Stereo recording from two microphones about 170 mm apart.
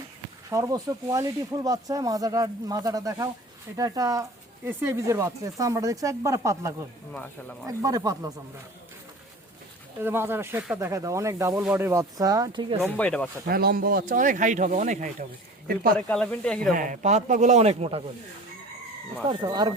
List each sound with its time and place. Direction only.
0.5 s speech: 20° right (ahead or behind)
10.0 s speech: 15° right (ahead or behind)
12.8 s speech: 5° left (ahead or behind)
13.5 s speech: 65° right (ahead or behind); by 15.1 s 50° right (ahead or behind)
15.6 s speech: 60° right (ahead or behind)
16.0 s speech: 10° left (ahead or behind)
16.7 s speech: 50° right (ahead or behind)
19.3 s speech: 25° right (ahead or behind)